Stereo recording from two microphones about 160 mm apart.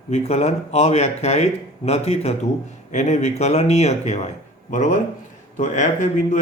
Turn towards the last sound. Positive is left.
turn(degrees=50)  # may be behind; listen again after turning